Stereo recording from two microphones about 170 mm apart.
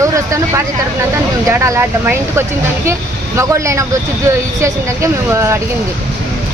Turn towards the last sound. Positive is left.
turn(degrees=-15)  # may be behind; listen again after turning